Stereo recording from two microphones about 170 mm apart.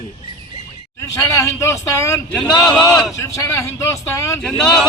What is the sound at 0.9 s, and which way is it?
A man's voice, 15° left (ahead or behind).